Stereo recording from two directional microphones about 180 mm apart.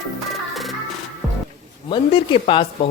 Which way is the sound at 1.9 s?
30° left (ahead or behind).